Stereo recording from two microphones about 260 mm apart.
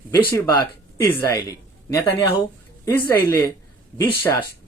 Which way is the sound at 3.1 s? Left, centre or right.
Centre.